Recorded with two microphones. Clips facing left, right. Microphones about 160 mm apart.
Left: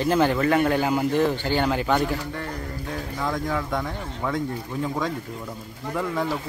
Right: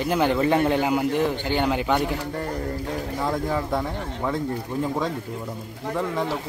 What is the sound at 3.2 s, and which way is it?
Speech, 25° right (ahead or behind).